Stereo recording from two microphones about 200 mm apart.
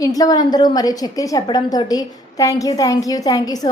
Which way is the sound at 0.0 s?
15° left (ahead or behind).